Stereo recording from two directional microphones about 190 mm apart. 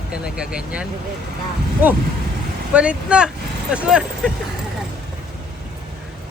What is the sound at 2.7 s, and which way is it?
Speech, 5° right (ahead or behind).